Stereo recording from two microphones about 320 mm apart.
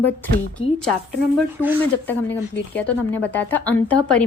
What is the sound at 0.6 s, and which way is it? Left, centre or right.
Speech, centre.